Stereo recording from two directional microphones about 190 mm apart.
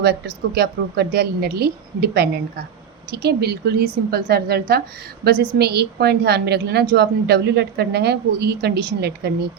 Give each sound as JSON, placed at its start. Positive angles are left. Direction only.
{"t": 0.0, "sound": "a woman's voice", "side_deg": -55}